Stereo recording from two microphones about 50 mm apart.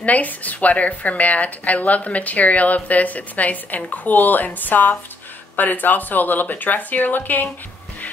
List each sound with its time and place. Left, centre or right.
0.0 s speech: left